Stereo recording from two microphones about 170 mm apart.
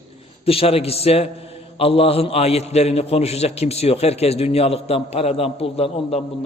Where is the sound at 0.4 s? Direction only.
35° left (ahead or behind).